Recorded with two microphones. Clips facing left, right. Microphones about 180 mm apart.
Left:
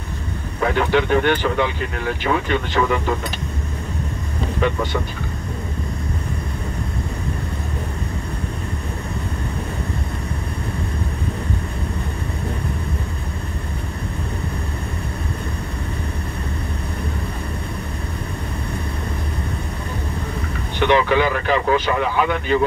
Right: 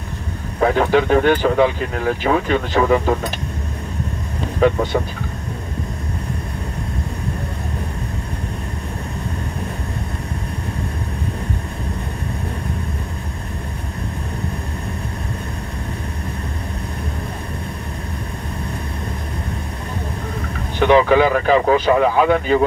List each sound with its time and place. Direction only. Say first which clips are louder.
0.6 s speech: right 3 dB; 40° right (ahead or behind)
4.6 s speech: right 6 dB; 35° right (ahead or behind)
20.8 s speech: right 4 dB; 40° right (ahead or behind)